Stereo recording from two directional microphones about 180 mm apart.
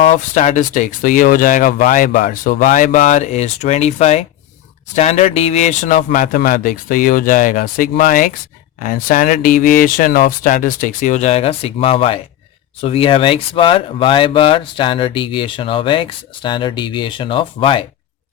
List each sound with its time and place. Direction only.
0.1 s speech: 40° left (ahead or behind)